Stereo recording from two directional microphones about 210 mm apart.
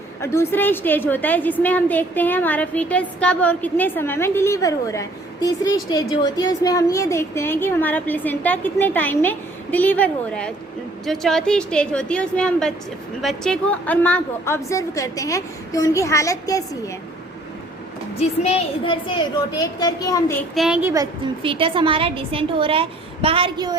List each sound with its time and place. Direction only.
0.2 s a woman's voice: 15° left (ahead or behind)
18.2 s a child's voice: 30° left (ahead or behind)
20.6 s a woman's voice: 5° right (ahead or behind)
20.9 s a woman's voice: 20° right (ahead or behind)